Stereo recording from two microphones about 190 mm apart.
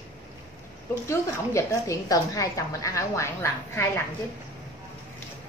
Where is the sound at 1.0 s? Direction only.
15° left (ahead or behind).